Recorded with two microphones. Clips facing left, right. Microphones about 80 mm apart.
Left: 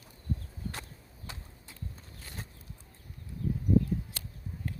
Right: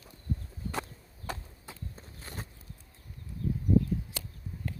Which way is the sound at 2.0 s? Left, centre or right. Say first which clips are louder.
Right 2 dB; right.